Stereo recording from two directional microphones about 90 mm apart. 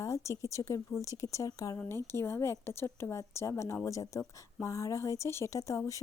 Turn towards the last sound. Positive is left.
turn(degrees=35)  # may be behind; listen again after turning